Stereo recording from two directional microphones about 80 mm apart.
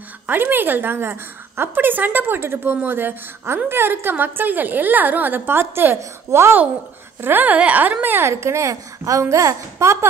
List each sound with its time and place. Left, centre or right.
0.3 s a woman's voice: right